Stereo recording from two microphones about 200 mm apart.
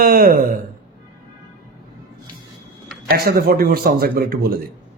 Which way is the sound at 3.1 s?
50° right (ahead or behind).